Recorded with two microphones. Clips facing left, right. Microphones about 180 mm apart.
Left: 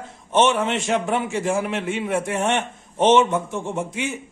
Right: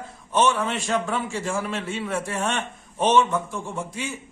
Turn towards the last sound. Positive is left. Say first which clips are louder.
# left 5 dB
turn(degrees=20)  # may be behind; listen again after turning